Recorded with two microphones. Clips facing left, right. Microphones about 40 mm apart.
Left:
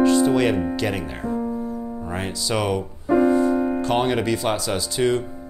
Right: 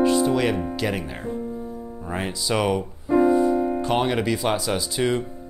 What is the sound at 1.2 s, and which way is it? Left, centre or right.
Speech, left.